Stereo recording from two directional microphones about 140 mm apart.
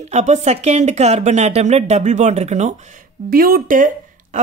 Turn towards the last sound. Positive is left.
turn(degrees=-70)  # may be behind; listen again after turning